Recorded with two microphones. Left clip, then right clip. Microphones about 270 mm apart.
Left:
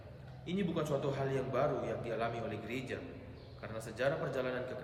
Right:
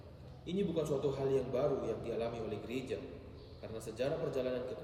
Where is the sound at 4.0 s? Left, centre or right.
Centre.